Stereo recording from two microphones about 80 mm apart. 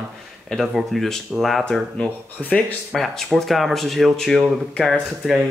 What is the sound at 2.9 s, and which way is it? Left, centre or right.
Speech, centre.